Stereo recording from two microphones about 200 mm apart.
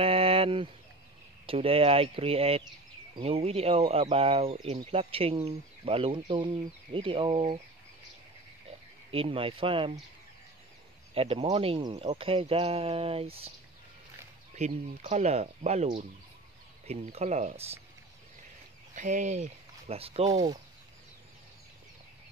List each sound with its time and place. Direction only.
0.0 s a sound: 30° right (ahead or behind)
1.4 s speech: 30° right (ahead or behind)
9.1 s speech: 30° right (ahead or behind)
11.1 s speech: 30° right (ahead or behind)
14.5 s speech: 35° right (ahead or behind)
18.9 s speech: 40° right (ahead or behind)
20.2 s speech: 20° right (ahead or behind)